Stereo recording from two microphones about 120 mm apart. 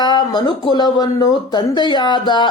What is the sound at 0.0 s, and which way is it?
Speech, 35° left (ahead or behind).